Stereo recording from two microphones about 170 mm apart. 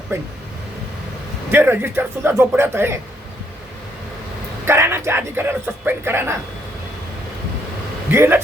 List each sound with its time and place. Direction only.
0.1 s speech: 15° right (ahead or behind)
1.5 s speech: 10° right (ahead or behind)
4.6 s speech: 15° right (ahead or behind)
8.1 s speech: 15° right (ahead or behind)